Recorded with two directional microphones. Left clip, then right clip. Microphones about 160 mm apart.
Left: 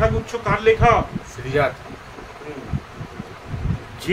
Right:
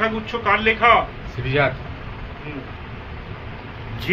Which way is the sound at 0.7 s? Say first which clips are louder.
Left 1 dB; 90° left.